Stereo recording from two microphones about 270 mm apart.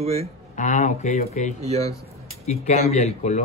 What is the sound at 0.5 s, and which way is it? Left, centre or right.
Speech, left.